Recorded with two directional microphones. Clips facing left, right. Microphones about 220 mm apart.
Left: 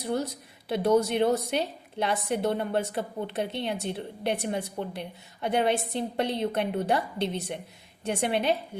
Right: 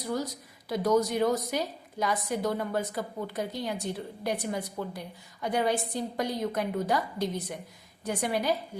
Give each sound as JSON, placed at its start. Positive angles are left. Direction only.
{"t": 0.0, "sound": "a woman's voice", "side_deg": 30}